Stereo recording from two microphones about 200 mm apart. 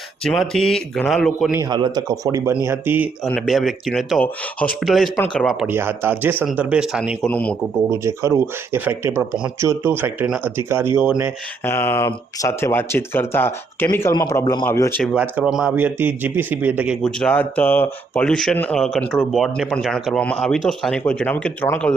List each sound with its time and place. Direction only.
0.3 s speech: centre (ahead or behind)
1.5 s speech: 20° right (ahead or behind)
3.2 s speech: centre (ahead or behind)
7.3 s speech: 5° left (ahead or behind)
7.9 s speech: 15° right (ahead or behind)
11.6 s speech: 10° left (ahead or behind)
15.0 s speech: 5° right (ahead or behind)
17.0 s speech: 5° left (ahead or behind)